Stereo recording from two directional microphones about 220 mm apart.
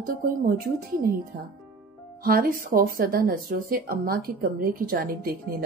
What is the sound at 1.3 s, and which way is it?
A woman's voice, 45° right (ahead or behind).